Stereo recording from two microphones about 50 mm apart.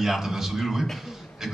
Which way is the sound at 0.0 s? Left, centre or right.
Centre.